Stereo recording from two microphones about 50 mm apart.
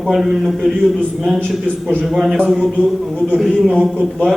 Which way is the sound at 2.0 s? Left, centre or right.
Centre.